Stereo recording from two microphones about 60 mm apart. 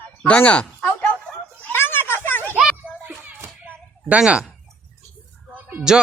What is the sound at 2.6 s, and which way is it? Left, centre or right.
Children playing, centre.